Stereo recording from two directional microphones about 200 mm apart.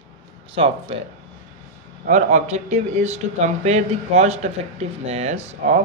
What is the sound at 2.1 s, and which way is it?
Speech, 35° right (ahead or behind).